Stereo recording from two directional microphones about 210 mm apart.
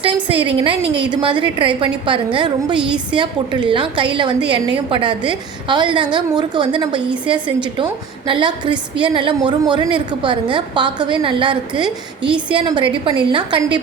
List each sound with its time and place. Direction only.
0.0 s a woman's voice: 25° right (ahead or behind)
2.7 s a woman's voice: 5° right (ahead or behind)
3.2 s a woman's voice: 20° right (ahead or behind)
12.2 s a woman's voice: 5° right (ahead or behind)
12.5 s a woman's voice: 25° right (ahead or behind)